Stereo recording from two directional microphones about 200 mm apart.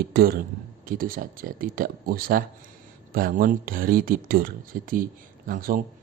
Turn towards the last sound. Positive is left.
turn(degrees=-45)  # may be behind; listen again after turning